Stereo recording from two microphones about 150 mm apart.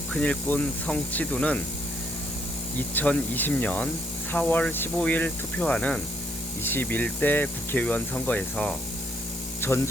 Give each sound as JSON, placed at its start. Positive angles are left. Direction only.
{"t": 0.1, "sound": "speech", "side_deg": 10}
{"t": 2.7, "sound": "speech", "side_deg": 10}